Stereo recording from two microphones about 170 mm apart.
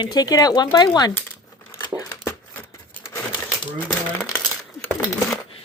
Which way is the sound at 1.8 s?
20° left (ahead or behind).